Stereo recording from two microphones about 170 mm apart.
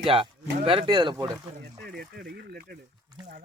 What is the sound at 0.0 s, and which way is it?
Speech, 30° right (ahead or behind).